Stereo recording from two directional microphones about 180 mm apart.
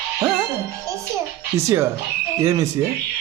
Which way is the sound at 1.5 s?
15° right (ahead or behind).